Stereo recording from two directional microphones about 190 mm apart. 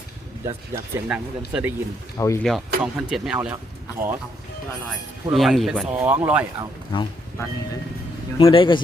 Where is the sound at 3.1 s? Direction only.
Centre (ahead or behind).